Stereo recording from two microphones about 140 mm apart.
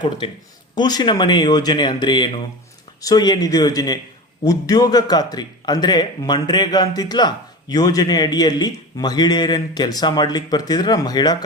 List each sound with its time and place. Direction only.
0.8 s a man's voice: 30° left (ahead or behind)